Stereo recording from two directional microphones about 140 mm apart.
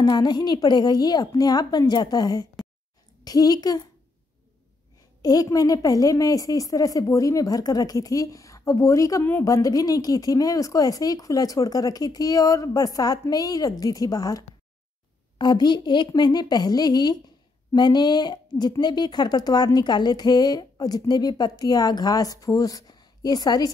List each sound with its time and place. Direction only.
0.0 s a woman's voice: 30° left (ahead or behind)
5.2 s a woman's voice: 25° left (ahead or behind)